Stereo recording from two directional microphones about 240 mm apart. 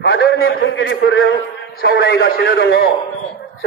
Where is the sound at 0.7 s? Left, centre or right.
Left.